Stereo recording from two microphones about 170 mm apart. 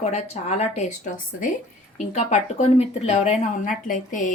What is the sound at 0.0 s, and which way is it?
A woman's voice, 40° left (ahead or behind).